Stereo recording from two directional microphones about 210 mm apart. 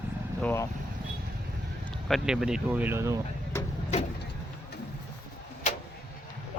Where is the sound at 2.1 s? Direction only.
Centre (ahead or behind).